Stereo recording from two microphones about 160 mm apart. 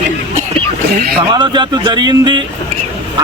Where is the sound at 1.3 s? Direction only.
30° right (ahead or behind).